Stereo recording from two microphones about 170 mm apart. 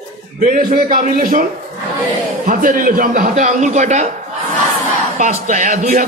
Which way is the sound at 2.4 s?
50° right (ahead or behind).